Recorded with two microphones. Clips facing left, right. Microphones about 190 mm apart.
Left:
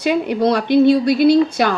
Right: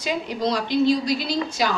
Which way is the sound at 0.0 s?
60° left (ahead or behind).